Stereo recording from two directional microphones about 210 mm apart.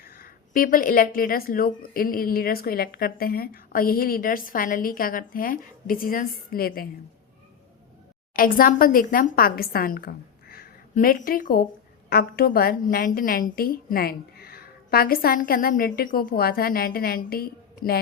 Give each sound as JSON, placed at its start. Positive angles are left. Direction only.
{"t": 0.0, "sound": "a woman's voice", "side_deg": 45}
{"t": 8.3, "sound": "a woman's voice", "side_deg": 40}